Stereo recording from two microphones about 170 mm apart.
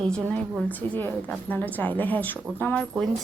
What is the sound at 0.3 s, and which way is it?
A woman's voice, 5° left (ahead or behind).